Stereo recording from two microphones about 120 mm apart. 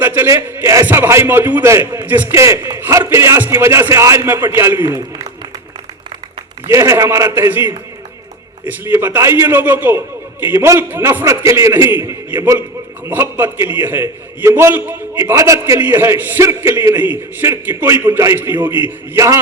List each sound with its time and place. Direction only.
0.0 s a sound: 15° right (ahead or behind)
0.3 s a man's voice: 25° right (ahead or behind)
6.7 s a man's voice: 25° right (ahead or behind)
19.1 s a man's voice: 25° right (ahead or behind)